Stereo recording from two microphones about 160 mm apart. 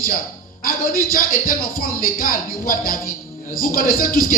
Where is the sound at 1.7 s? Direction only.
60° left (ahead or behind).